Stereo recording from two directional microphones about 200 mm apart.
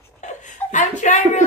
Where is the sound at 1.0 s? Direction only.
35° left (ahead or behind).